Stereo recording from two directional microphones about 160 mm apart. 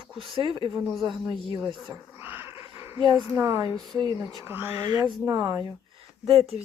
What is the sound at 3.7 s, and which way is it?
Speech, centre (ahead or behind).